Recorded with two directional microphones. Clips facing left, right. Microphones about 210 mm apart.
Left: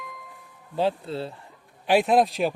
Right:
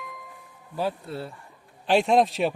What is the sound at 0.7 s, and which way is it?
Speech, 25° left (ahead or behind).